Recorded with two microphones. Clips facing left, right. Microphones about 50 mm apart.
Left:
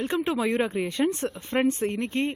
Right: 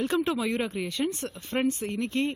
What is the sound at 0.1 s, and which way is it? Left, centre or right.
Speech, left.